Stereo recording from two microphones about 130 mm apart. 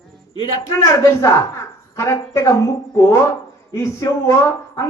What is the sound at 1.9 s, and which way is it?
A woman's voice, 20° left (ahead or behind).